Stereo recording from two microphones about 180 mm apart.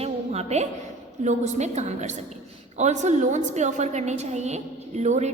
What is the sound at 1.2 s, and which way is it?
A woman's voice, 40° right (ahead or behind).